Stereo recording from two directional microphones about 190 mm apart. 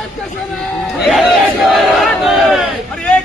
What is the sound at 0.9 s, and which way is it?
Crowd, centre (ahead or behind).